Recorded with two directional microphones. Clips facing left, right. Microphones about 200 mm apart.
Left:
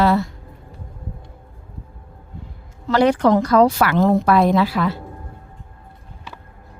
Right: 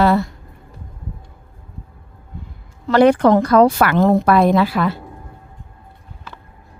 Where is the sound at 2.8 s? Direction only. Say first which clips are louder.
Right 3 dB; 55° right (ahead or behind).